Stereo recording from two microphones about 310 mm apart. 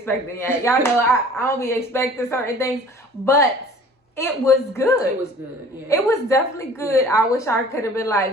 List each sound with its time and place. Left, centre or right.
0.0 s a woman's voice: centre